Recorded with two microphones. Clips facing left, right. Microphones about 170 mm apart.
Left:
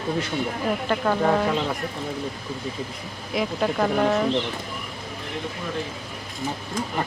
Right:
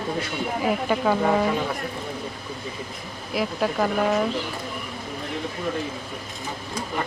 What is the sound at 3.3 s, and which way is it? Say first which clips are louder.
Speech: even; centre (ahead or behind).